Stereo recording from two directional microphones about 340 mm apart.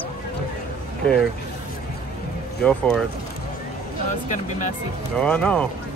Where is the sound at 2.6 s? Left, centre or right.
Centre.